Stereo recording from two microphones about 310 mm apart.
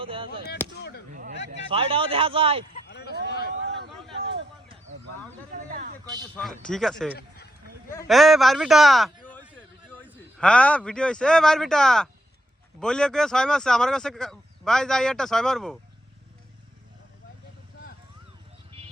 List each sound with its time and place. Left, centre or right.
0.0 s chop: centre
0.8 s chop: left
1.1 s a man's voice: right
2.9 s a sound: left
5.6 s speech: right
6.3 s speech: centre